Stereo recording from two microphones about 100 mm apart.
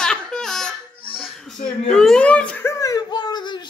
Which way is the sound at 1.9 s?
5° left (ahead or behind).